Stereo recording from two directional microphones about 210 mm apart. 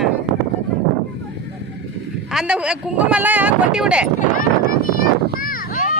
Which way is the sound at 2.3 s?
5° right (ahead or behind).